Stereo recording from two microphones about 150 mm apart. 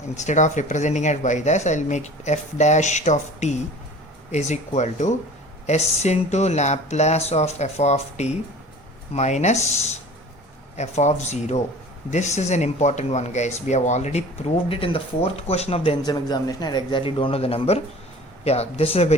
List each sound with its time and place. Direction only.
0.2 s speech: 55° left (ahead or behind)
16.0 s a man's voice: 25° left (ahead or behind)